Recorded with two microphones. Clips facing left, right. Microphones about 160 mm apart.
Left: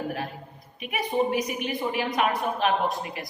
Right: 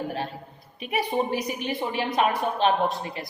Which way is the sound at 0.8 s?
35° right (ahead or behind).